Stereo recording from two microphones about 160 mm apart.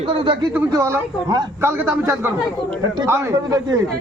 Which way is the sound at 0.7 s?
20° right (ahead or behind).